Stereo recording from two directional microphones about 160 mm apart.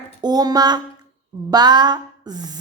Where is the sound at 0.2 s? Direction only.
25° right (ahead or behind).